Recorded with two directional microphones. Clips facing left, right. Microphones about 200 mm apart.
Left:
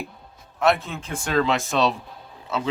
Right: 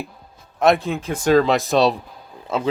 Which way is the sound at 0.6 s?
35° right (ahead or behind).